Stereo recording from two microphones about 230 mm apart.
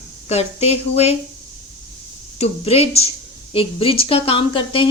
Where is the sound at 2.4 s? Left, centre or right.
Left.